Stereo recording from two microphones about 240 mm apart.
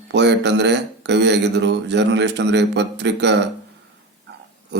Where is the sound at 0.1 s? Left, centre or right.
Right.